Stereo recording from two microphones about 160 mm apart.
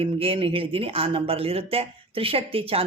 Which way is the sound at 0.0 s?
35° right (ahead or behind).